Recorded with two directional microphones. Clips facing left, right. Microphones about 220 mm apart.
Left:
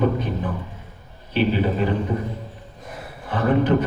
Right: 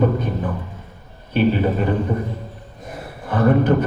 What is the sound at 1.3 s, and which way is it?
Speech, 50° right (ahead or behind).